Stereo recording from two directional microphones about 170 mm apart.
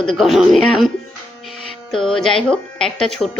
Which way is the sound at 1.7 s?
5° left (ahead or behind).